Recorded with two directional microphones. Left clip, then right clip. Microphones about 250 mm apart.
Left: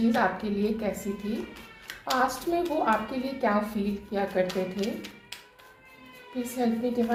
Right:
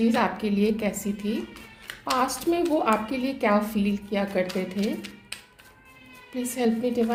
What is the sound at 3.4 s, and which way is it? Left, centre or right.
Speech, right.